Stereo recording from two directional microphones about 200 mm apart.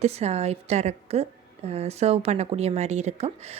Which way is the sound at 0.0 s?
30° right (ahead or behind).